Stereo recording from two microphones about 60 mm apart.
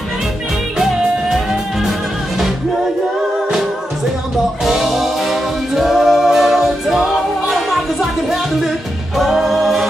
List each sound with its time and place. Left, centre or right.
0.7 s music: centre
4.6 s music: centre